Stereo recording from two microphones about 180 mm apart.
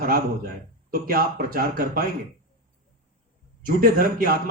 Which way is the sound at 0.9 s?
55° right (ahead or behind).